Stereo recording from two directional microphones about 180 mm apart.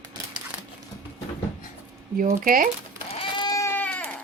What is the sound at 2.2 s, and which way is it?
Speech, 50° right (ahead or behind).